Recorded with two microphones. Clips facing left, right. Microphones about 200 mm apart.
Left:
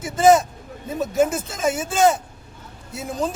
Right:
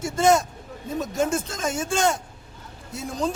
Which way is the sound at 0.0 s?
Centre (ahead or behind).